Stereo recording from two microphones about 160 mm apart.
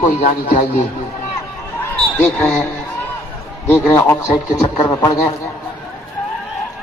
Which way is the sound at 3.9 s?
20° left (ahead or behind).